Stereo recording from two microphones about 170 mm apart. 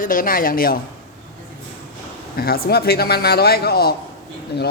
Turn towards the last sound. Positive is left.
turn(degrees=70)  # may be behind; listen again after turning